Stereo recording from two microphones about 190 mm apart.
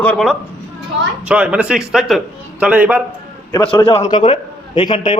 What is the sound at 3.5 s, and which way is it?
A man's voice, 25° left (ahead or behind).